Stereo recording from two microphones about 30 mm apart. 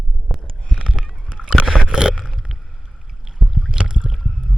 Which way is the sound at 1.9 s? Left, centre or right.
Right.